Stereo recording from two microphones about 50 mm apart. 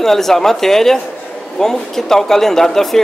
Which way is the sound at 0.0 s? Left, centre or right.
Centre.